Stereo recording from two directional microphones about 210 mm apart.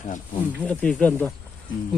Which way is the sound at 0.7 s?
5° left (ahead or behind).